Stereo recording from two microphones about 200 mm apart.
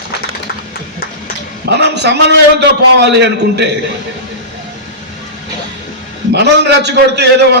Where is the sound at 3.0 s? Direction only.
60° right (ahead or behind).